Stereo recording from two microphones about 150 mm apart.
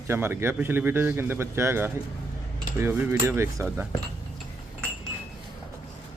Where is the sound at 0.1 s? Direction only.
15° right (ahead or behind).